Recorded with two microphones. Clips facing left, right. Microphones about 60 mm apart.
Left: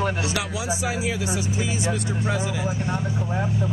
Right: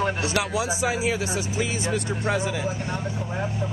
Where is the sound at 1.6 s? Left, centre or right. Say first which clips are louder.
Even; right.